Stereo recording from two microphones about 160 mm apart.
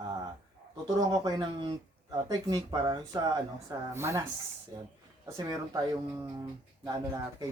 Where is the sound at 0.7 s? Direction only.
25° right (ahead or behind).